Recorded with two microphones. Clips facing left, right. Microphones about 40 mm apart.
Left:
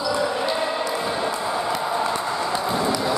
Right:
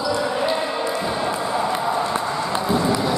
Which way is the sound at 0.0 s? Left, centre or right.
Centre.